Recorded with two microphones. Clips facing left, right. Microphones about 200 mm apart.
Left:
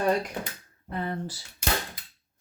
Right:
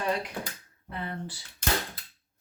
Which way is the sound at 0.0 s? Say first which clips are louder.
Left 5 dB; 45° left (ahead or behind).